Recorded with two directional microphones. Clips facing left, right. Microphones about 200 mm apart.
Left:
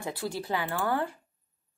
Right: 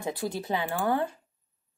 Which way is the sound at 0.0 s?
20° right (ahead or behind).